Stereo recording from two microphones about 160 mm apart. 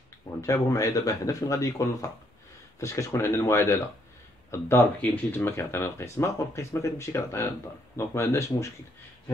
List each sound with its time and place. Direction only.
0.4 s speech: 20° left (ahead or behind)